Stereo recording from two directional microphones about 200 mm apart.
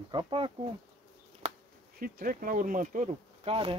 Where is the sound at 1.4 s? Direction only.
30° right (ahead or behind).